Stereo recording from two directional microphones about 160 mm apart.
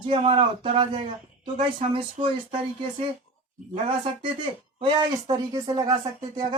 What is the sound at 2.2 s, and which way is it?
Speech, 40° right (ahead or behind).